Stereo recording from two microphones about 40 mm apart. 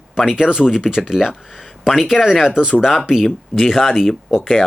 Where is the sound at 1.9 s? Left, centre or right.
Centre.